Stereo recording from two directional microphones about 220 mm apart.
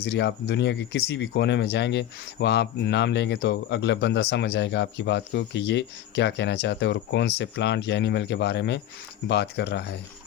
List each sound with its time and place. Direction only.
0.0 s speech: 50° left (ahead or behind)